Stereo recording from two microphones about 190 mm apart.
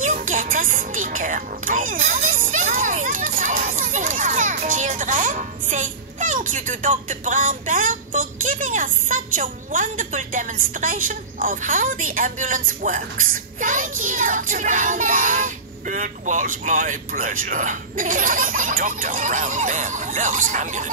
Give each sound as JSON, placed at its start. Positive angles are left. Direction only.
{"t": 0.0, "sound": "speech", "side_deg": -45}